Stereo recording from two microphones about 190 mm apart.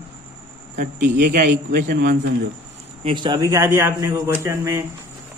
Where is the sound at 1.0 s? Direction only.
60° right (ahead or behind).